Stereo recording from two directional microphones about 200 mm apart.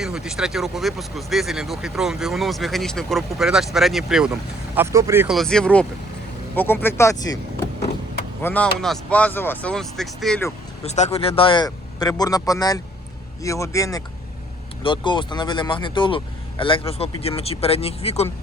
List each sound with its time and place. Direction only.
0.0 s speech: centre (ahead or behind)
4.7 s speech: 10° right (ahead or behind)
5.4 s speech: 5° left (ahead or behind)
8.4 s speech: 10° left (ahead or behind)
10.8 s speech: 35° left (ahead or behind)